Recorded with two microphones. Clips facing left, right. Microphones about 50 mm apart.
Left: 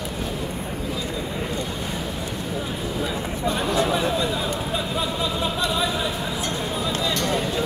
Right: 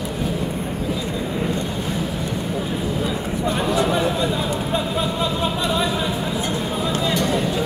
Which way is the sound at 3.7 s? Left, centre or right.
Centre.